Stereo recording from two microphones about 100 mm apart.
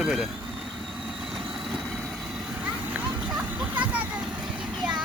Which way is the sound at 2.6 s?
20° right (ahead or behind).